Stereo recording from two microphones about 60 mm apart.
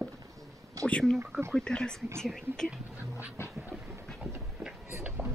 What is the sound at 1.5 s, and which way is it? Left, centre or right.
Speech, centre.